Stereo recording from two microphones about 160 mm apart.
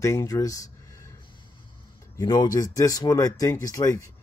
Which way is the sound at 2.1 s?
25° left (ahead or behind).